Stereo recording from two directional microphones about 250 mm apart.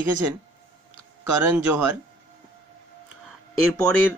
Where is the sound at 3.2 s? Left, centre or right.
Centre.